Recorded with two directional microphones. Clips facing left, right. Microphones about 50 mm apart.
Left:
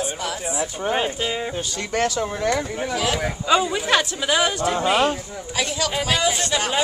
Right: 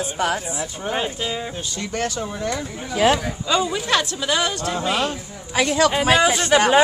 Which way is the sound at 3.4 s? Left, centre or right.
Centre.